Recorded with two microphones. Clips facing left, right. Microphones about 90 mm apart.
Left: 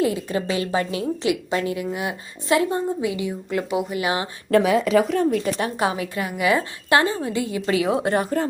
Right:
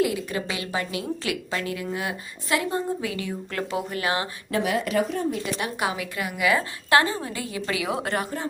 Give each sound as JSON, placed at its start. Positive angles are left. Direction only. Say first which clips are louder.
{"t": 0.0, "sound": "a woman's voice", "louder": "left 3 dB", "side_deg": 30}
{"t": 5.0, "sound": "a woman's voice", "louder": "left 7 dB", "side_deg": 80}
{"t": 5.5, "sound": "a woman's voice", "louder": "left 4 dB", "side_deg": 30}